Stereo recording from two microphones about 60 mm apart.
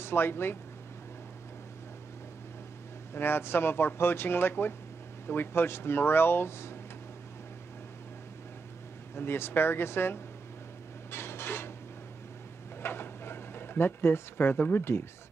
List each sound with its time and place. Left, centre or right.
0.0 s speech: left
3.2 s speech: left
9.1 s speech: left
11.1 s dishes: left
12.8 s a sound: left